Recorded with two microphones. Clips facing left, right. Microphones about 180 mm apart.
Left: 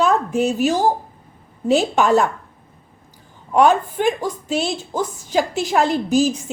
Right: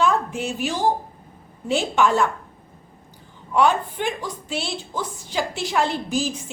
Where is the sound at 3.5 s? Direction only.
45° left (ahead or behind).